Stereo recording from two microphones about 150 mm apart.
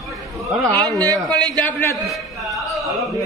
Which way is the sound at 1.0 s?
25° right (ahead or behind).